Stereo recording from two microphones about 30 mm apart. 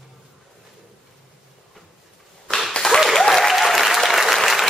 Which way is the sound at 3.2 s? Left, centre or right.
Centre.